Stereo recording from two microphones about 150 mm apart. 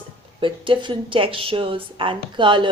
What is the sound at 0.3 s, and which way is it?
A woman's voice, 35° right (ahead or behind).